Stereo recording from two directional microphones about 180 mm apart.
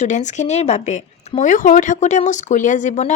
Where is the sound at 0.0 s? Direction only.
40° left (ahead or behind).